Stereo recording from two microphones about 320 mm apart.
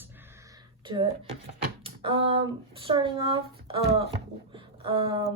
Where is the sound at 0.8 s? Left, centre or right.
Centre.